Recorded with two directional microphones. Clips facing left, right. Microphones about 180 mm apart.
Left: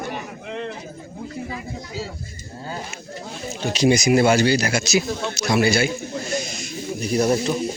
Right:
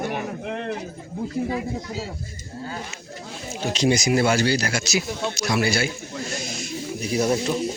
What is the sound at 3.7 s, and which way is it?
A man's voice, 15° left (ahead or behind).